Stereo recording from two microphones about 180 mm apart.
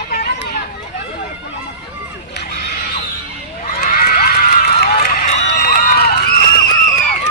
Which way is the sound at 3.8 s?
50° left (ahead or behind).